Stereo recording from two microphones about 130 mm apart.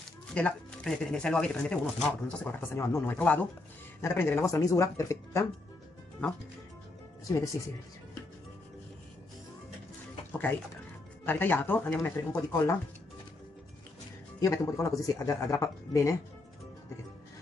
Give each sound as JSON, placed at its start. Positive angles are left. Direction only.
{"t": 0.3, "sound": "speech", "side_deg": 10}
{"t": 2.7, "sound": "speech", "side_deg": 20}
{"t": 6.2, "sound": "speech", "side_deg": 10}
{"t": 7.2, "sound": "speech", "side_deg": 25}
{"t": 11.2, "sound": "speech", "side_deg": 15}
{"t": 14.4, "sound": "speech", "side_deg": 25}